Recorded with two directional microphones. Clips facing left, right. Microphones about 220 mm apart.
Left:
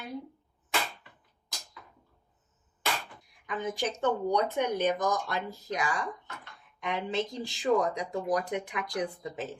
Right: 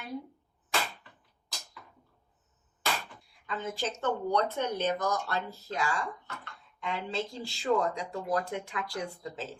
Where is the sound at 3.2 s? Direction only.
15° left (ahead or behind).